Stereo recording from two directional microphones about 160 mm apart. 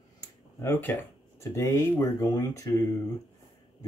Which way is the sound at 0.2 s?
15° left (ahead or behind).